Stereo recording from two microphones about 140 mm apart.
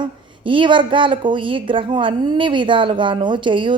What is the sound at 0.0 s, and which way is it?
A woman's voice, 35° right (ahead or behind).